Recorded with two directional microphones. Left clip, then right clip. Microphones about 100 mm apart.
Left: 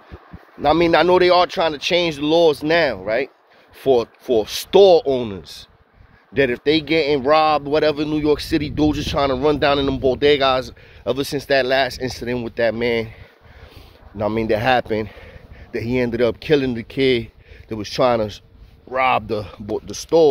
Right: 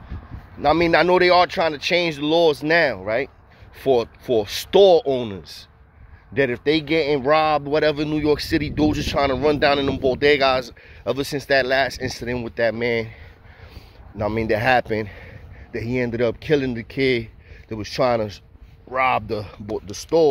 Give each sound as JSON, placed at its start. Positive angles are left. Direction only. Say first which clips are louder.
{"t": 0.6, "sound": "speech", "louder": "left 2 dB", "side_deg": 30}
{"t": 14.1, "sound": "speech", "louder": "left 2 dB", "side_deg": 20}
{"t": 15.0, "sound": "speech", "louder": "left 1 dB", "side_deg": 25}
{"t": 17.6, "sound": "speech", "louder": "left 3 dB", "side_deg": 30}